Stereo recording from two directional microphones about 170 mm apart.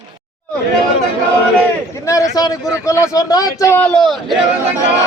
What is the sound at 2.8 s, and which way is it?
A man's voice, 15° left (ahead or behind).